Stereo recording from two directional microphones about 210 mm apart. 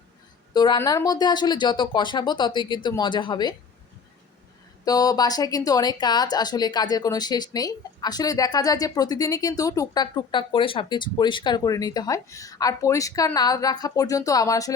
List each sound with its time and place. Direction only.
0.5 s speech: 20° left (ahead or behind)
4.9 s speech: 20° left (ahead or behind)